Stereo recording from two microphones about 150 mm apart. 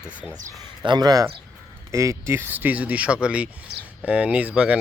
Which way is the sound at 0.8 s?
30° right (ahead or behind).